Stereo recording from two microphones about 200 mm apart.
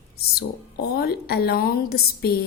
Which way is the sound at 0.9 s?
50° left (ahead or behind).